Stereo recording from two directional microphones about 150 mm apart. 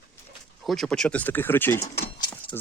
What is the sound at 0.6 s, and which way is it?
Speech, centre (ahead or behind).